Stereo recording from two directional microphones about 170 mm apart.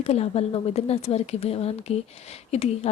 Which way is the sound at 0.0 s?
35° left (ahead or behind).